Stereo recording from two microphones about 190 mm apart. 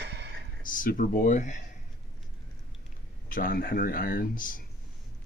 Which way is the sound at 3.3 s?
50° left (ahead or behind).